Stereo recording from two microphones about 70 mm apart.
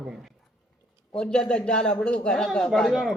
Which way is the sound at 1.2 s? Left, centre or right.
Centre.